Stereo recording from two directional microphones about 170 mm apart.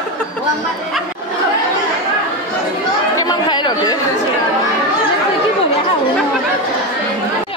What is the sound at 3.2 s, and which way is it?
Chatter, 25° left (ahead or behind).